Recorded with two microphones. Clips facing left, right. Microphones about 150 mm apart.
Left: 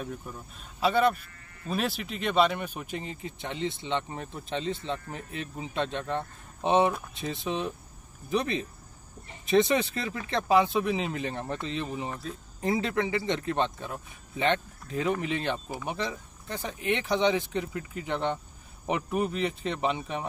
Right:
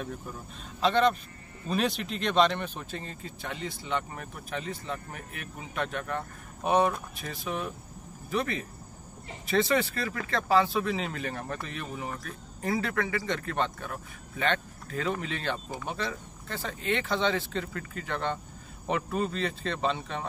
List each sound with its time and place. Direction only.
0.7 s speech: 10° left (ahead or behind)